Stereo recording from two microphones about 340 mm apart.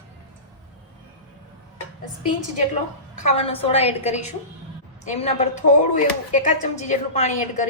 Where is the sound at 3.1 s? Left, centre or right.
Centre.